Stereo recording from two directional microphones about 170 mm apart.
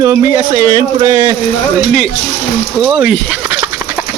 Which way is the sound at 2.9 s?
Centre (ahead or behind).